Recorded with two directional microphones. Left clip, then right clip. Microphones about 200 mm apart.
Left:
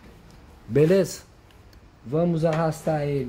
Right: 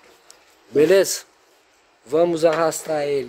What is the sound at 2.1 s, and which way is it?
Speech, 60° right (ahead or behind).